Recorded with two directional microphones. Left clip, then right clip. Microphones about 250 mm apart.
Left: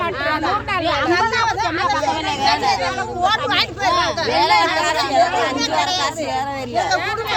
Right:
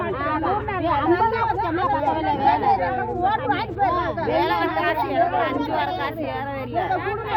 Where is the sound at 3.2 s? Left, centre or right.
Centre.